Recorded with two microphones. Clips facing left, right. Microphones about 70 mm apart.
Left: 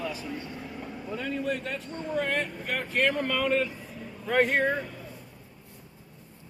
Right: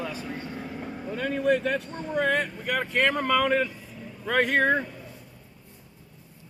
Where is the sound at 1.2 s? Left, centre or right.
Right.